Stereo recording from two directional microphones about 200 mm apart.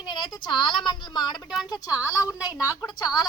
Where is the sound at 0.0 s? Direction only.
20° left (ahead or behind).